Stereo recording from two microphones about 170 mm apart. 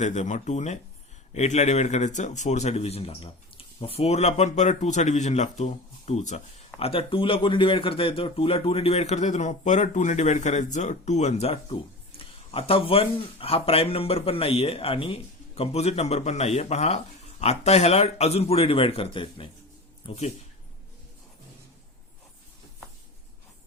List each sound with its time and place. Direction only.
0.0 s speech: 45° left (ahead or behind)